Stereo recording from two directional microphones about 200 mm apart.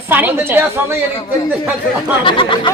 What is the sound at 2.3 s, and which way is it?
Speech, 25° left (ahead or behind).